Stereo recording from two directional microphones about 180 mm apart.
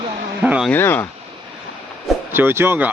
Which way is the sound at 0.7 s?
10° left (ahead or behind).